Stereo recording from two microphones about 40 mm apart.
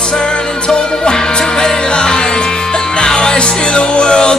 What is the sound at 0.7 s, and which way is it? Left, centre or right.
Music, left.